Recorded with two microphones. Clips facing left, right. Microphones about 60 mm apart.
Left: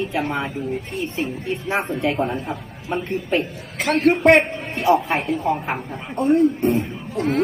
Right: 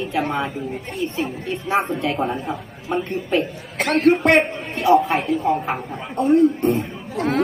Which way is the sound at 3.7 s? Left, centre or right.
Right.